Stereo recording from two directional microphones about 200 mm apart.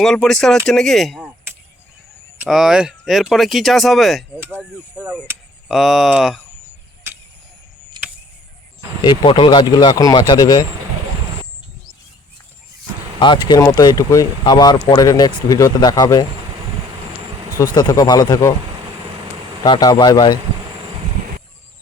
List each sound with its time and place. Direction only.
0.0 s speech: centre (ahead or behind)
2.4 s speech: 5° right (ahead or behind)
4.4 s speech: 10° right (ahead or behind)
7.1 s a sound: 10° right (ahead or behind)
9.0 s speech: 25° left (ahead or behind)
13.1 s speech: 25° left (ahead or behind)
17.7 s speech: 20° left (ahead or behind)
19.6 s speech: 20° left (ahead or behind)